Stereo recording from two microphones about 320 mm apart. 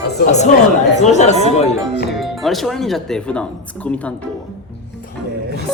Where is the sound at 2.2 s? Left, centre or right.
Centre.